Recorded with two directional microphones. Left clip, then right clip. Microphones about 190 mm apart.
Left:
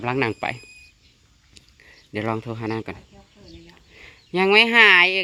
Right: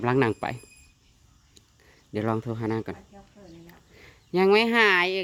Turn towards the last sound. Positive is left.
turn(degrees=-5)  # may be behind; listen again after turning